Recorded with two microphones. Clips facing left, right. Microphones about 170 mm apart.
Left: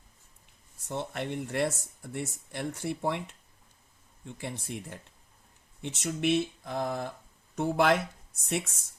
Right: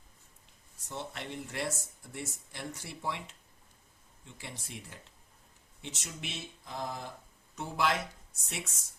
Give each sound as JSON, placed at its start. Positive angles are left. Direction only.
{"t": 0.9, "sound": "speech", "side_deg": 55}